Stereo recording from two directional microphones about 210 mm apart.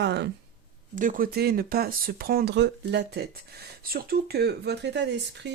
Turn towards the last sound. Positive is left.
turn(degrees=-55)  # may be behind; listen again after turning